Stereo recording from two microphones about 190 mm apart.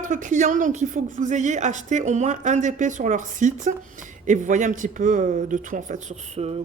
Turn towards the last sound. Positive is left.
turn(degrees=-35)  # may be behind; listen again after turning